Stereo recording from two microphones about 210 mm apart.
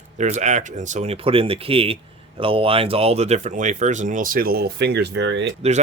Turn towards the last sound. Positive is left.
turn(degrees=-60)  # may be behind; listen again after turning